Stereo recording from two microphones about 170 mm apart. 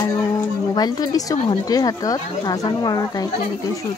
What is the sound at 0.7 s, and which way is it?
Speech, 25° left (ahead or behind).